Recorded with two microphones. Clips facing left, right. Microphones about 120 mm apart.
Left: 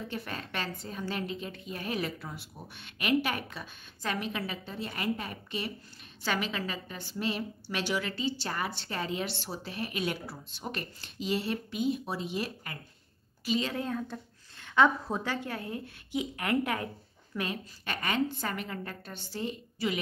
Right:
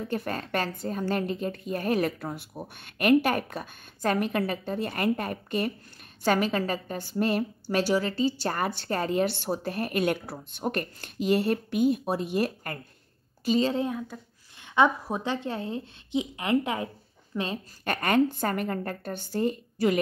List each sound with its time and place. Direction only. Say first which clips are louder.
0.1 s a woman's voice: right 8 dB; 45° right (ahead or behind)
7.7 s a woman's voice: right 8 dB; 35° right (ahead or behind)
13.5 s a woman's voice: right 7 dB; 30° right (ahead or behind)
13.8 s speech: right 2 dB; 5° right (ahead or behind)
14.6 s a woman's voice: right 2 dB; 15° right (ahead or behind)
17.8 s a woman's voice: right 7 dB; 50° right (ahead or behind)